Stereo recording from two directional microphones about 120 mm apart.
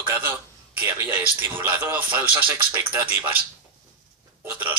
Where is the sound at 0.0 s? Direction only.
15° right (ahead or behind).